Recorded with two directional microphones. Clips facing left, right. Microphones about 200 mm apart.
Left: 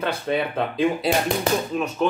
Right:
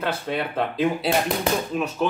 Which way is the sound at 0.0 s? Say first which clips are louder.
Left 2 dB; centre (ahead or behind).